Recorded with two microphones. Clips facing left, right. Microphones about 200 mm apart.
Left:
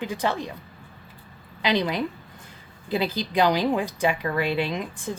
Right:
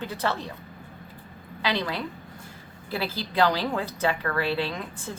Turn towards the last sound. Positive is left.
turn(degrees=15)  # may be behind; listen again after turning